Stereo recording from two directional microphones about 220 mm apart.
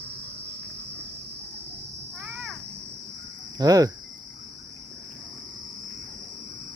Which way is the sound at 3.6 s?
15° right (ahead or behind).